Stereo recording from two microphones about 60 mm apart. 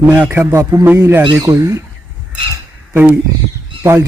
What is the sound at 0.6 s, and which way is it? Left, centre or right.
Speech, right.